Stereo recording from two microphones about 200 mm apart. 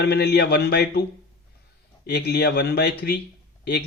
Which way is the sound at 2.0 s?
55° left (ahead or behind).